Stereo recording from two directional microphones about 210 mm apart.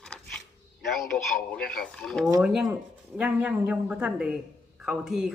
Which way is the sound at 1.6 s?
45° left (ahead or behind).